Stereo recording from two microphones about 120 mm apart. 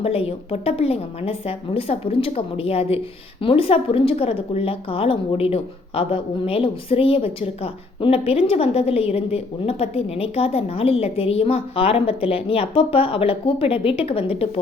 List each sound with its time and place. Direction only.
0.0 s a woman's voice: 55° left (ahead or behind)